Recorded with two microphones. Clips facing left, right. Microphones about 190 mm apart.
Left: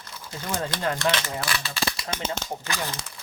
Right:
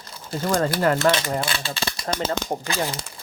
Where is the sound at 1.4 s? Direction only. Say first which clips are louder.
Right 2 dB; 30° right (ahead or behind).